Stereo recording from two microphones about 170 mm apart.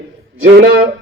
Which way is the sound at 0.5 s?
65° right (ahead or behind).